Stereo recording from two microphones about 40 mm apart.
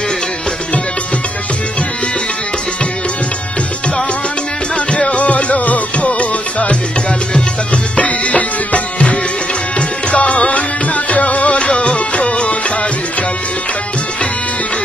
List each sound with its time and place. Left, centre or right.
5.1 s music: left